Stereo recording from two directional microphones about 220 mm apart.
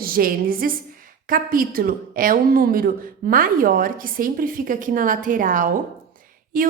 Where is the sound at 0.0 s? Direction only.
40° right (ahead or behind).